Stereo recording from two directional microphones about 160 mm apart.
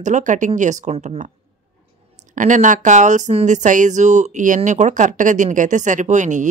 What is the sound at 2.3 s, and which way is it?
A woman's voice, 55° right (ahead or behind).